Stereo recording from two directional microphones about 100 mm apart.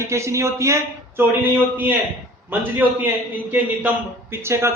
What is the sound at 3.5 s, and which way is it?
A man's voice, 20° right (ahead or behind).